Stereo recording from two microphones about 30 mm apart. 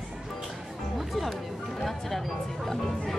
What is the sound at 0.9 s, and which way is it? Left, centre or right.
Music, centre.